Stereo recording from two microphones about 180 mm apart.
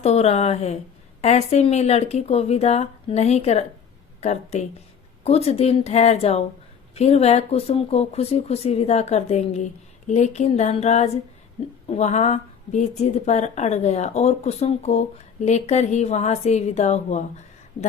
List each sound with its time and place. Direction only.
0.0 s a woman's voice: 35° left (ahead or behind)